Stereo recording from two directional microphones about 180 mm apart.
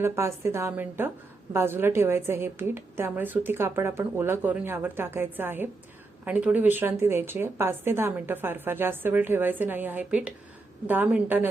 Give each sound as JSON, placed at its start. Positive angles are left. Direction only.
{"t": 0.0, "sound": "a woman's voice", "side_deg": -15}